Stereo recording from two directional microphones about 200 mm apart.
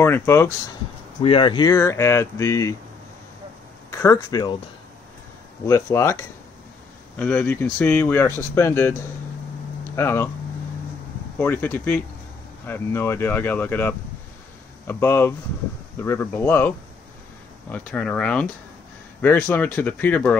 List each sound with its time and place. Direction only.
0.0 s speech: 10° left (ahead or behind)
1.2 s speech: 25° left (ahead or behind)
3.9 s speech: 15° left (ahead or behind)
5.7 s speech: 15° left (ahead or behind)
9.9 s speech: 10° left (ahead or behind)
11.3 s speech: 10° left (ahead or behind)